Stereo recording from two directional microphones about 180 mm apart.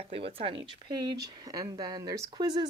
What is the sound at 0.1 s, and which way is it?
Speech, 30° right (ahead or behind).